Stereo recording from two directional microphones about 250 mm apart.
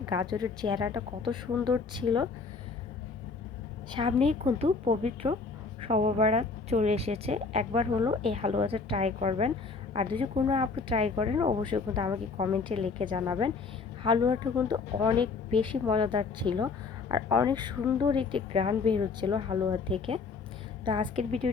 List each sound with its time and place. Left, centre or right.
0.0 s speech: centre
3.9 s a woman's voice: right